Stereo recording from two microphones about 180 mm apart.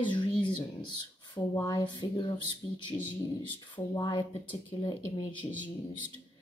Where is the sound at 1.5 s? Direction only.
20° left (ahead or behind).